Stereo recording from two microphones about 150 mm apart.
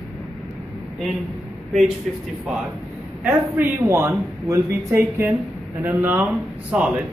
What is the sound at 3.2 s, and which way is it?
Speech, 15° right (ahead or behind).